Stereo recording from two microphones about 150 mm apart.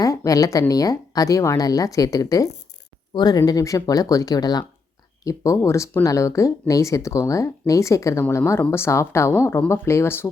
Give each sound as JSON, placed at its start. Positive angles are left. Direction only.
{"t": 0.0, "sound": "a woman's voice", "side_deg": 20}